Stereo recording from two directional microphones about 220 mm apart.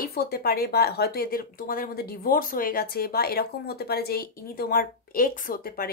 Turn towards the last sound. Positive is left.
turn(degrees=40)  # may be behind; listen again after turning